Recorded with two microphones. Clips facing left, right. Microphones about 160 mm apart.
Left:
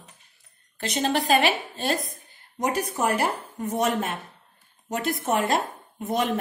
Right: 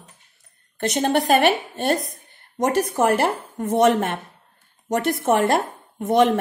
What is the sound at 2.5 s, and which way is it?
Speech, 70° right (ahead or behind).